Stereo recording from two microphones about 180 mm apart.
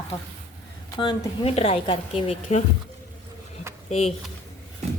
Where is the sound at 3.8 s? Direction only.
35° left (ahead or behind).